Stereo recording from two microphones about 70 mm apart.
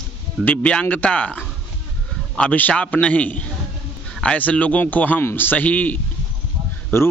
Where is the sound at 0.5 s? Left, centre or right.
Centre.